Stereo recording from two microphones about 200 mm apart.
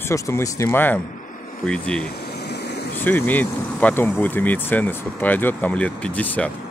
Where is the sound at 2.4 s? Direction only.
55° left (ahead or behind).